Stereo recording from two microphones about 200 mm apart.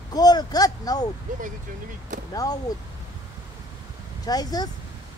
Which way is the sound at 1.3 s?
40° right (ahead or behind).